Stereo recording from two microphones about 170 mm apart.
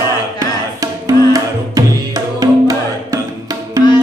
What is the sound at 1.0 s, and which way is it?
Music, 20° right (ahead or behind).